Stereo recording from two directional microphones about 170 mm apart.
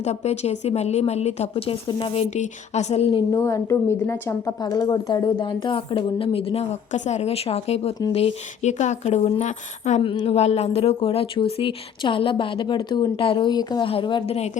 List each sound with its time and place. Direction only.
0.0 s a woman's voice: 40° left (ahead or behind)
2.3 s a woman's voice: 40° left (ahead or behind)
3.3 s a woman's voice: 15° left (ahead or behind); by 10.0 s 45° left (ahead or behind)
10.0 s a woman's voice: 30° left (ahead or behind)